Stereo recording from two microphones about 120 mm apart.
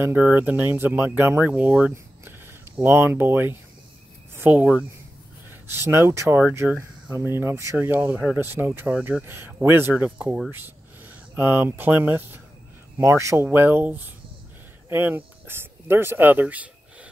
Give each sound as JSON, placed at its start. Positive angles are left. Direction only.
{"t": 0.0, "sound": "speech", "side_deg": -15}
{"t": 2.2, "sound": "a sound", "side_deg": -20}
{"t": 4.4, "sound": "speech", "side_deg": -15}
{"t": 9.2, "sound": "speech", "side_deg": -20}
{"t": 11.3, "sound": "speech", "side_deg": -15}